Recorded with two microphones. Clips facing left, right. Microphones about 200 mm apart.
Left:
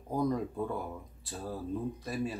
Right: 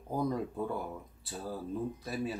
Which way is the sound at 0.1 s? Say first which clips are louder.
Left 2 dB; centre (ahead or behind).